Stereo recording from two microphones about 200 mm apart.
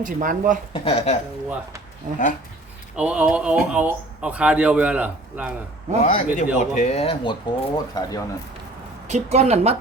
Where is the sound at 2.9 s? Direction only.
5° right (ahead or behind).